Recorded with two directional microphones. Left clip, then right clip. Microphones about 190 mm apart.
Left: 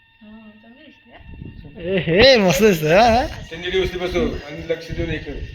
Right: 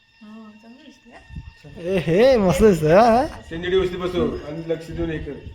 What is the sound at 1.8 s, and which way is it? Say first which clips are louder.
Speech: left 2 dB; 10° right (ahead or behind).